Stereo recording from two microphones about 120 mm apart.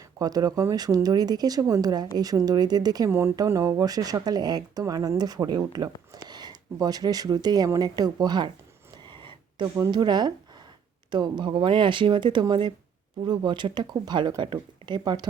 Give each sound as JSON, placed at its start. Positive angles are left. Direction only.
{"t": 0.2, "sound": "speech", "side_deg": -30}
{"t": 3.1, "sound": "speech", "side_deg": -20}
{"t": 9.0, "sound": "a sound", "side_deg": -40}
{"t": 9.7, "sound": "speech", "side_deg": -35}